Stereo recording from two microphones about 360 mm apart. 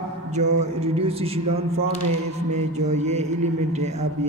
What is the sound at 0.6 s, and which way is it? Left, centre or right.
A man's voice, centre.